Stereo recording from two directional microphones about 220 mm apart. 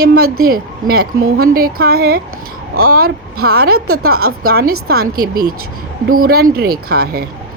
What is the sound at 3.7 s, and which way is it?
Speech, 80° right.